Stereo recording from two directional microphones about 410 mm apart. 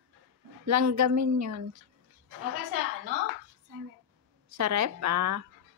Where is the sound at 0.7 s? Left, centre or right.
Right.